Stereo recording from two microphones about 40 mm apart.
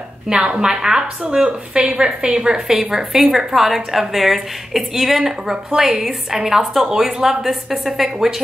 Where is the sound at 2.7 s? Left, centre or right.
Centre.